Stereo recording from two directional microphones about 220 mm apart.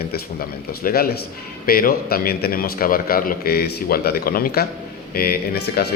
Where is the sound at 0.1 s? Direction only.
40° left (ahead or behind).